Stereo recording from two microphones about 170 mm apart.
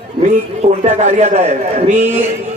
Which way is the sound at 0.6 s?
40° right (ahead or behind).